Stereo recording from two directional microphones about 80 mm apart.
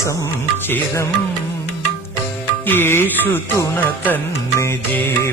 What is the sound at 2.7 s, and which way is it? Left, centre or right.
Music, left.